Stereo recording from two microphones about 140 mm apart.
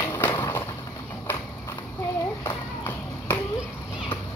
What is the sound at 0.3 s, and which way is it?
Skateboard, 25° left (ahead or behind).